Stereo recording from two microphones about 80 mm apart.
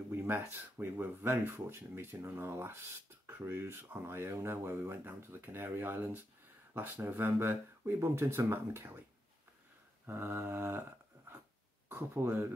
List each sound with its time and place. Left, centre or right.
0.1 s speech: right
10.0 s a sound: right
11.9 s speech: right